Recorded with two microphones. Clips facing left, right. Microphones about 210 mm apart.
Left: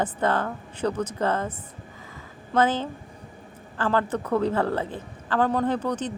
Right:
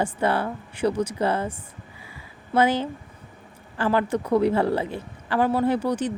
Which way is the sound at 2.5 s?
10° right (ahead or behind).